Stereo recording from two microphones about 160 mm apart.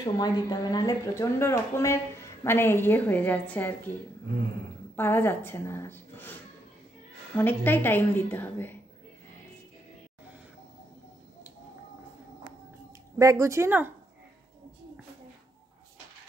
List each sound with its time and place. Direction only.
0.0 s speech: 25° left (ahead or behind)
4.9 s a woman's voice: 15° left (ahead or behind)
7.3 s speech: 10° left (ahead or behind)
13.2 s speech: 20° right (ahead or behind)